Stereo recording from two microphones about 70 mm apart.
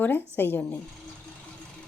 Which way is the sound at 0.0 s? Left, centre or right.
Left.